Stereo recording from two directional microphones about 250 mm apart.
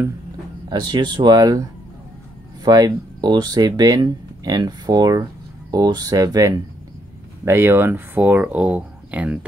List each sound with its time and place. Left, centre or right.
0.7 s speech: centre